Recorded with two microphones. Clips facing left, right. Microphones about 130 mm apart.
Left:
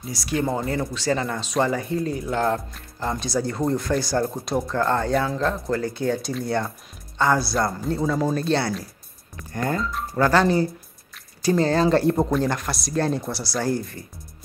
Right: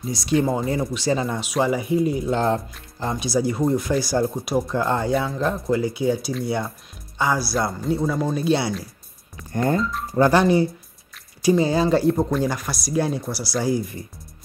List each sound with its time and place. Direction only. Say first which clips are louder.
0.1 s speech: right 5 dB; 20° right (ahead or behind)
0.4 s speech: right 1 dB; 5° right (ahead or behind)
0.7 s speech: right 2 dB; 15° right (ahead or behind)
3.1 s speech: right 3 dB; 10° right (ahead or behind)
4.6 s speech: even; 15° right (ahead or behind)
5.1 s speech: even; 5° right (ahead or behind)
5.4 s speech: right 2 dB; 15° right (ahead or behind)
7.5 s speech: right 1 dB; centre (ahead or behind)
9.5 s speech: right 4 dB; 25° right (ahead or behind); by 13.9 s 5° right (ahead or behind)